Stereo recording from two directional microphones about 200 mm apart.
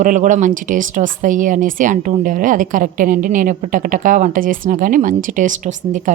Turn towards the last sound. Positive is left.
turn(degrees=-40)  # may be behind; listen again after turning